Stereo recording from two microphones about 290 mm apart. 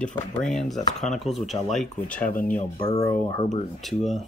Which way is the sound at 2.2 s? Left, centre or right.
Left.